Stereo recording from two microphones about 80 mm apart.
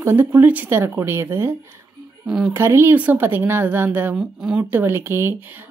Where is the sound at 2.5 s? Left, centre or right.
Right.